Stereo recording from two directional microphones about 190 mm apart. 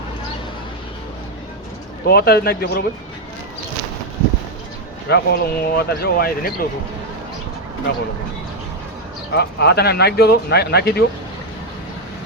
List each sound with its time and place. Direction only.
2.0 s speech: 55° left (ahead or behind)
5.0 s speech: 55° left (ahead or behind)
9.3 s speech: 60° left (ahead or behind)